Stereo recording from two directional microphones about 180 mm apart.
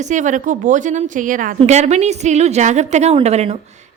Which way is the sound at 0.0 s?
45° right (ahead or behind).